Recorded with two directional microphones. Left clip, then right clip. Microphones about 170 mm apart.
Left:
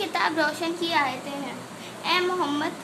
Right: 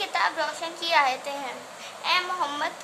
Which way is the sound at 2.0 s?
Centre (ahead or behind).